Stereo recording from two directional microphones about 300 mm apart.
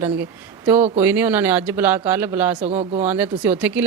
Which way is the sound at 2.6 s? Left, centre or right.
Right.